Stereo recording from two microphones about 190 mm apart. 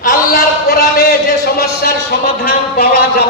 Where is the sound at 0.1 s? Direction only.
50° left (ahead or behind).